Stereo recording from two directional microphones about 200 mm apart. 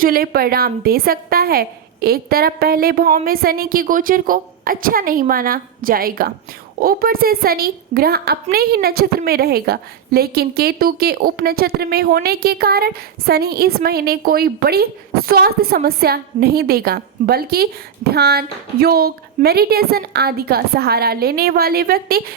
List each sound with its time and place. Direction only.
0.0 s a woman's voice: 50° right (ahead or behind)